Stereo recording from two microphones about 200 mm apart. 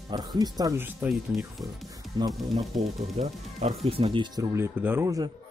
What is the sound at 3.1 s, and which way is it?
Speech, 35° right (ahead or behind).